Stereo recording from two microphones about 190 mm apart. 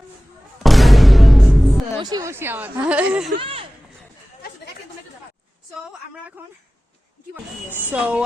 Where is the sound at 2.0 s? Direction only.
20° right (ahead or behind).